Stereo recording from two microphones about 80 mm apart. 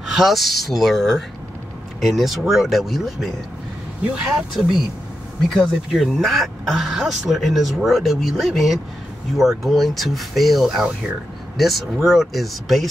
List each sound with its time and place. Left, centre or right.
0.1 s speech: centre